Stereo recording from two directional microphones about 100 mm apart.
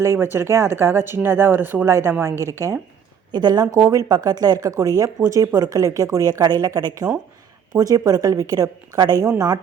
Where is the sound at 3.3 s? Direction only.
45° right (ahead or behind).